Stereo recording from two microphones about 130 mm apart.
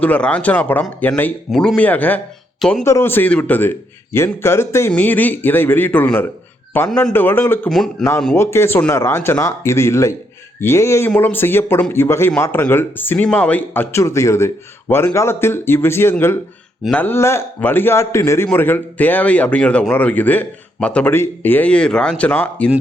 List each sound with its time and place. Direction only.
0.0 s speech: 10° left (ahead or behind)
2.6 s speech: centre (ahead or behind)
2.8 s speech: 20° left (ahead or behind)
7.7 s speech: centre (ahead or behind)
8.4 s a man's voice: 20° left (ahead or behind)